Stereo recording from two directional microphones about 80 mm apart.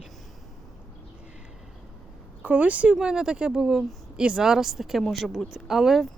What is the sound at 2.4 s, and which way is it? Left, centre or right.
Speech, centre.